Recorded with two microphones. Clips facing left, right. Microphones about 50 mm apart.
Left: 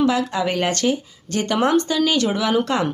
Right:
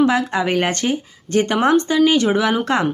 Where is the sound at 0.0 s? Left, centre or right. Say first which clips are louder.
Right 2 dB; right.